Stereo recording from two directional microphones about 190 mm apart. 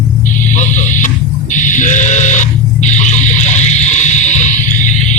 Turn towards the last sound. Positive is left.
turn(degrees=40)  # may be behind; listen again after turning